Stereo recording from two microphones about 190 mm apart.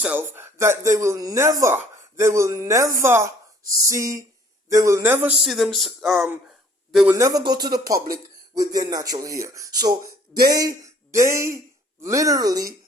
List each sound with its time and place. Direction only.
0.0 s a man's voice: 10° right (ahead or behind)
7.2 s speech: 20° right (ahead or behind)